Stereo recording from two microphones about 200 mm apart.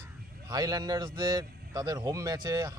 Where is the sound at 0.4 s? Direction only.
20° right (ahead or behind).